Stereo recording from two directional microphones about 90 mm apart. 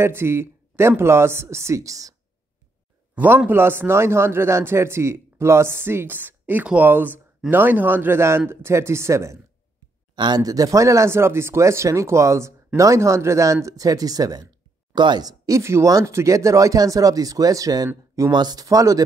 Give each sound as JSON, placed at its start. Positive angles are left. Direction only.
{"t": 0.0, "sound": "a man's voice", "side_deg": -25}
{"t": 3.2, "sound": "a man's voice", "side_deg": -20}
{"t": 10.1, "sound": "speech", "side_deg": -50}
{"t": 18.3, "sound": "speech", "side_deg": -50}